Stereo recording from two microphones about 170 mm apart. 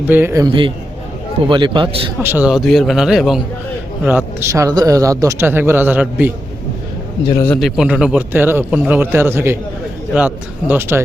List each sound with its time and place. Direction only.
0.1 s a man's voice: 15° right (ahead or behind)
1.5 s a man's voice: 30° right (ahead or behind)
2.2 s a man's voice: 10° right (ahead or behind)
7.4 s a man's voice: centre (ahead or behind); by 11.0 s 15° right (ahead or behind)